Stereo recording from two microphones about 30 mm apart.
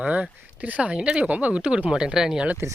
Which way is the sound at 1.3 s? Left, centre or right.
Right.